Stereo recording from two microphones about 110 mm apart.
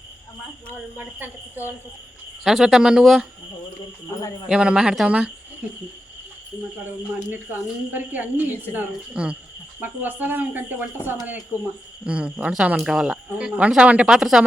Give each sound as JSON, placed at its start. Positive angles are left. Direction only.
{"t": 2.4, "sound": "speech", "side_deg": 0}
{"t": 4.4, "sound": "speech", "side_deg": -10}
{"t": 7.3, "sound": "speech", "side_deg": -15}
{"t": 11.5, "sound": "speech", "side_deg": 20}
{"t": 12.0, "sound": "speech", "side_deg": -10}